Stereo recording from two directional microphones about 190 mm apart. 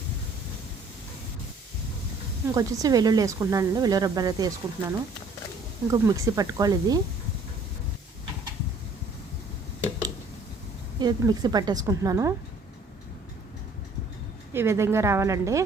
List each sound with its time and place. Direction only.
2.6 s speech: 20° right (ahead or behind)
11.0 s speech: 20° right (ahead or behind)
14.5 s a woman's voice: 15° right (ahead or behind)